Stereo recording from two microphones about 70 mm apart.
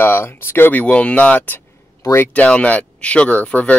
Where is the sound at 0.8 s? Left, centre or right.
Centre.